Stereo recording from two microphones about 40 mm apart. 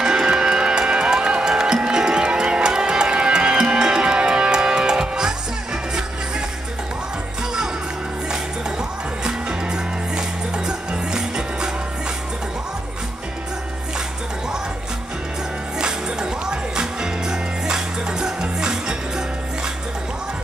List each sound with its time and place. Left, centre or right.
0.0 s music: right
9.2 s music: centre
15.8 s music: centre